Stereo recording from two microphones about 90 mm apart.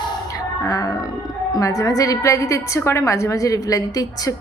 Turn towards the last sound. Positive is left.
turn(degrees=40)  # may be behind; listen again after turning